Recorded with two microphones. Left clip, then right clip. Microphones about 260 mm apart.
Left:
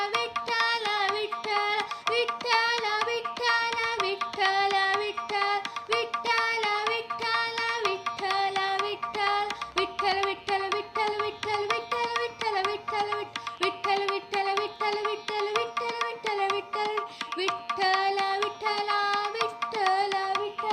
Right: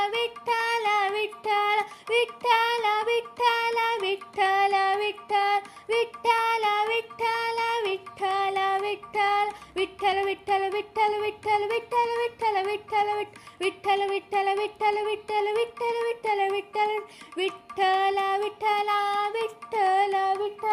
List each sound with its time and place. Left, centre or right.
0.4 s music: centre
1.5 s child singing: centre
4.4 s music: centre
17.7 s child singing: centre
19.7 s carnatic music: centre